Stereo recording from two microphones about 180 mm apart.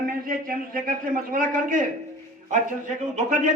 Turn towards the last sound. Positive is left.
turn(degrees=-45)  # may be behind; listen again after turning